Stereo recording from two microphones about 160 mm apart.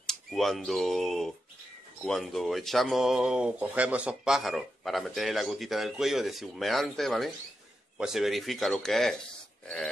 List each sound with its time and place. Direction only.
0.0 s speech: centre (ahead or behind)